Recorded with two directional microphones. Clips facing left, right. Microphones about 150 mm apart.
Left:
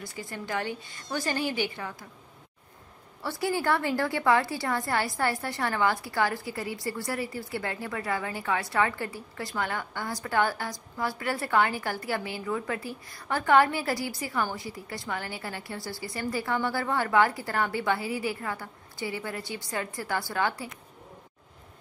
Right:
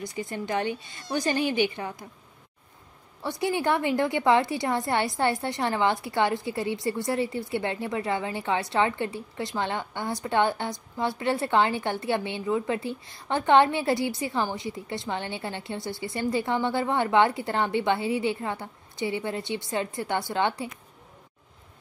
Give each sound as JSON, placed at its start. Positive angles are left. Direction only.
{"t": 0.0, "sound": "a woman's voice", "side_deg": -20}
{"t": 3.2, "sound": "a woman's voice", "side_deg": -20}